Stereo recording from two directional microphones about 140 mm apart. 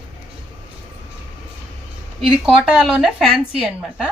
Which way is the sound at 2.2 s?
5° right (ahead or behind).